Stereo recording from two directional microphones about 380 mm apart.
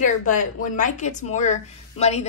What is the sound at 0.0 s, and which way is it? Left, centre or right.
A woman's voice, centre.